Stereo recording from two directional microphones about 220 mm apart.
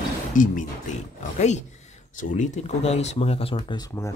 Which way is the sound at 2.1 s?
35° left (ahead or behind).